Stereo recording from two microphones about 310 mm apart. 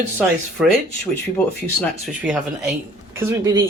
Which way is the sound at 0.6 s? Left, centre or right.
Centre.